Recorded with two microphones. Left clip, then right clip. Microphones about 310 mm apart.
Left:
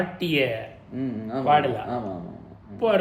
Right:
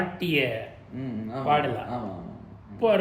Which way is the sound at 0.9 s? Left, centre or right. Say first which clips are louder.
Left 5 dB; left.